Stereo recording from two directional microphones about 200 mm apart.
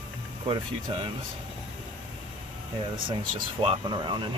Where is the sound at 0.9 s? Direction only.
25° right (ahead or behind).